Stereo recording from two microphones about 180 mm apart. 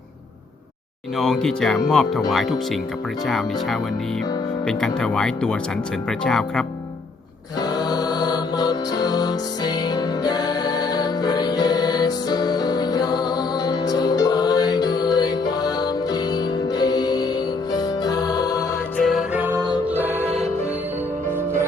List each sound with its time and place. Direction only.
1.1 s speech: centre (ahead or behind)
7.6 s music: 20° left (ahead or behind)
18.9 s music: centre (ahead or behind)